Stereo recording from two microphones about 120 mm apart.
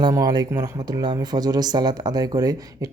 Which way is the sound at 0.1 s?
30° right (ahead or behind).